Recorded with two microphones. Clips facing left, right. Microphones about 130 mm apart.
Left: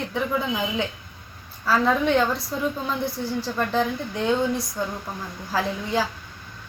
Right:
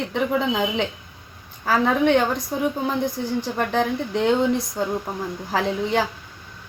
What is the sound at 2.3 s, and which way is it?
A woman's voice, 15° right (ahead or behind).